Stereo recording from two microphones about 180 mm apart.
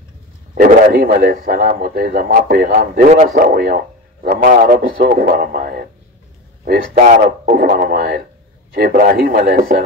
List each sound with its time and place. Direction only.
0.9 s a man's voice: 55° right (ahead or behind)
3.3 s a man's voice: 55° right (ahead or behind)